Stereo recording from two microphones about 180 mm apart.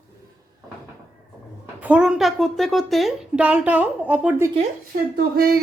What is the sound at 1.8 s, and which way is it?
A woman's voice, 5° right (ahead or behind).